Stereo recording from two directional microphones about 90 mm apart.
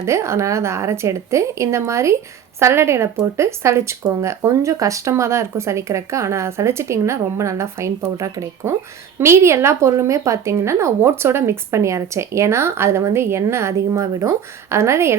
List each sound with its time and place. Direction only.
0.0 s speech: 30° right (ahead or behind)